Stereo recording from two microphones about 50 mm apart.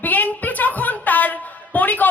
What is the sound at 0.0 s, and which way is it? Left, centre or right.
A woman's voice, left.